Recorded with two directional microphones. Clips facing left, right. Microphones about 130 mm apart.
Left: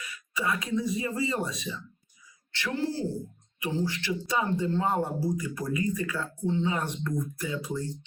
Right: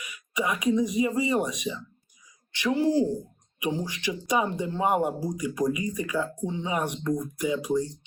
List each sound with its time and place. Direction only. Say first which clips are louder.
0.0 s speech: right 3 dB; 15° right (ahead or behind)